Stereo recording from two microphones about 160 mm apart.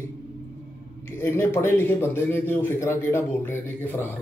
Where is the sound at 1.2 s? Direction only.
15° left (ahead or behind).